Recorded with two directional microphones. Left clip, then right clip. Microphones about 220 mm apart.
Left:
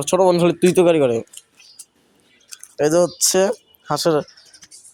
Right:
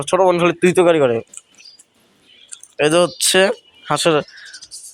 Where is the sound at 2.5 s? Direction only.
5° left (ahead or behind).